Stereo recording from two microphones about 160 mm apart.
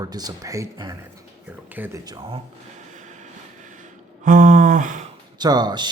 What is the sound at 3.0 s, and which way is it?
Train, 50° right (ahead or behind).